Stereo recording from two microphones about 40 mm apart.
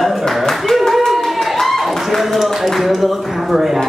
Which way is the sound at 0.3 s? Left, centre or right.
Centre.